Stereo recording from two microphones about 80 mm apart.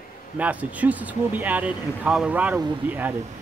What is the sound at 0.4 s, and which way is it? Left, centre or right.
A man's voice, centre.